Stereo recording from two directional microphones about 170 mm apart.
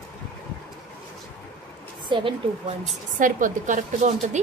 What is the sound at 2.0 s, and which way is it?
Speech, 30° right (ahead or behind).